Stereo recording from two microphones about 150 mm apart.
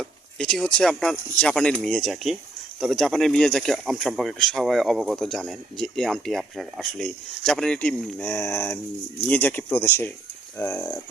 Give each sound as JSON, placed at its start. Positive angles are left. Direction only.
{"t": 0.0, "sound": "speech", "side_deg": 5}